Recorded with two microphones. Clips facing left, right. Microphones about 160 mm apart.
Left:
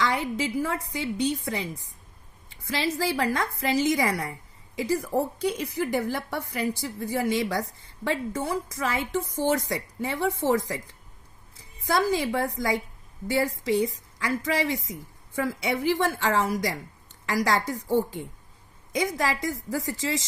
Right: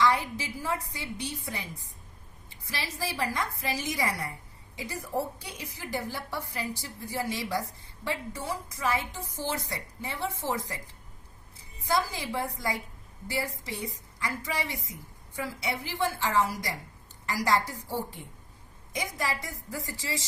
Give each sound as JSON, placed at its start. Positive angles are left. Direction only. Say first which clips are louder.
{"t": 0.0, "sound": "a woman's voice", "louder": "even", "side_deg": 75}
{"t": 2.6, "sound": "a woman's voice", "louder": "left 9 dB", "side_deg": 85}
{"t": 11.9, "sound": "a woman's voice", "louder": "left 5 dB", "side_deg": 75}
{"t": 15.4, "sound": "a woman's voice", "louder": "left 7 dB", "side_deg": 70}